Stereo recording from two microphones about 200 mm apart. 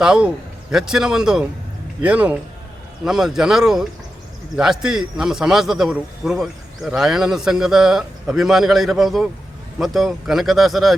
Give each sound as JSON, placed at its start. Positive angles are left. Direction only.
{"t": 0.0, "sound": "a man's voice", "side_deg": -5}